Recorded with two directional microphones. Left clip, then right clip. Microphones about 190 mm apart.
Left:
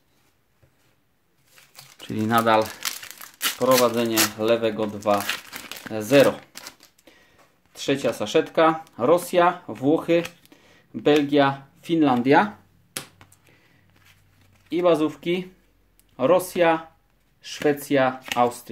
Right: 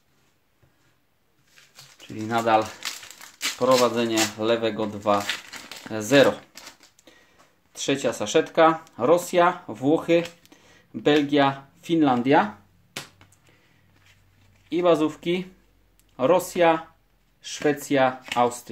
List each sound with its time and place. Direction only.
2.1 s speech: 25° left (ahead or behind)
3.8 s speech: 5° left (ahead or behind)
5.2 s crumpling: 20° left (ahead or behind)
5.9 s speech: centre (ahead or behind)
14.7 s speech: centre (ahead or behind)